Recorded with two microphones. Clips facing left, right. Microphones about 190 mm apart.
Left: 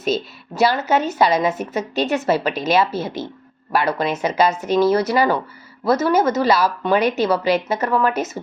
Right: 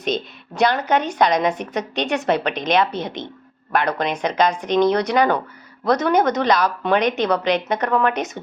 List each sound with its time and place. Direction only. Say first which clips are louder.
0.0 s a woman's voice: left 2 dB; 5° left (ahead or behind)